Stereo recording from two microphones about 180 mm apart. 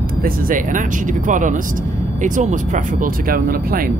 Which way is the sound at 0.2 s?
50° right (ahead or behind).